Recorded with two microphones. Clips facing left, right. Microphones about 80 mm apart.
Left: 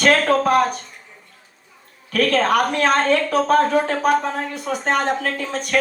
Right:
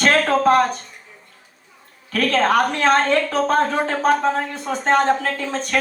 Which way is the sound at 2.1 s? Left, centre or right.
Right.